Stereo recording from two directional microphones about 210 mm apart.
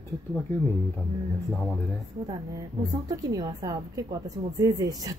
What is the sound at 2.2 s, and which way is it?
A woman's voice, 15° right (ahead or behind).